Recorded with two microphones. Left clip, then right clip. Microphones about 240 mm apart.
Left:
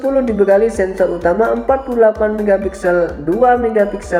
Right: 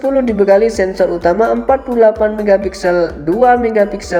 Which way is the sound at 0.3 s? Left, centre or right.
Right.